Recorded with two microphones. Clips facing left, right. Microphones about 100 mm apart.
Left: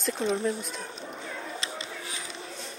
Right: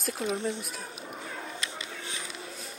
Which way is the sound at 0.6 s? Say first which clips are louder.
Left 2 dB; 5° right (ahead or behind).